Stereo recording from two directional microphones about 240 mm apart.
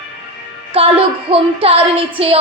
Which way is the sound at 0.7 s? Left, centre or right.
Right.